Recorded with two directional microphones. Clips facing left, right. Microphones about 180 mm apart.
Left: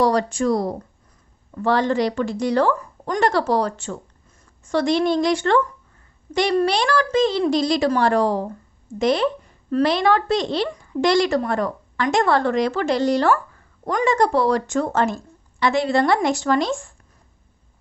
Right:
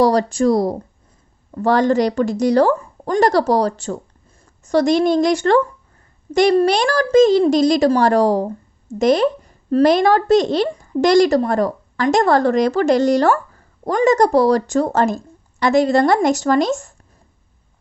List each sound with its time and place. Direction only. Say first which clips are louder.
0.0 s a woman's voice: right 4 dB; 35° right (ahead or behind)